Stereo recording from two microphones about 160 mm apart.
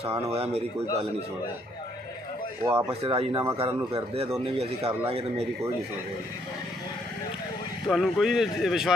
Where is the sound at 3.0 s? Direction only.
35° right (ahead or behind).